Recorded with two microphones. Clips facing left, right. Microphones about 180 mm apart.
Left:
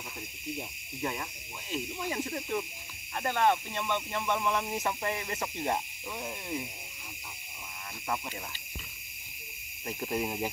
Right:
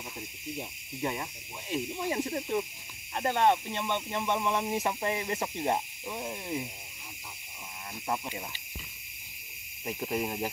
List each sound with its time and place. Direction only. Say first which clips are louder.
1.7 s speech: right 3 dB; 20° right (ahead or behind)
9.8 s speech: right 1 dB; 5° right (ahead or behind)